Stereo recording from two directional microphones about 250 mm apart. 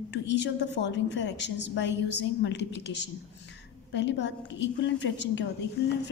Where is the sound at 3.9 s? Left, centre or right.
Left.